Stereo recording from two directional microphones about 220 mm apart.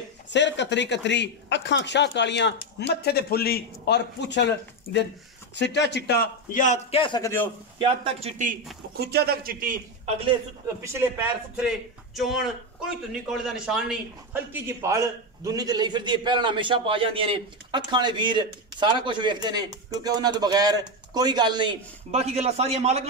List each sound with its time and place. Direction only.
0.3 s a man's voice: 55° left (ahead or behind); by 7.5 s 10° left (ahead or behind)
7.8 s a man's voice: 25° right (ahead or behind)
9.0 s a man's voice: 45° right (ahead or behind)
10.8 s a man's voice: 10° right (ahead or behind)
11.6 s a man's voice: centre (ahead or behind); by 23.0 s 30° right (ahead or behind)